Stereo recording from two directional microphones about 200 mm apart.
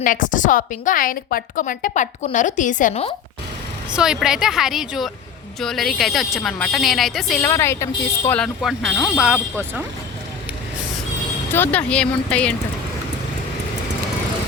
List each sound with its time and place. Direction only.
0.0 s a woman's voice: 40° left (ahead or behind)
3.9 s speech: 5° right (ahead or behind)
8.6 s speech: centre (ahead or behind)
11.5 s speech: 10° left (ahead or behind)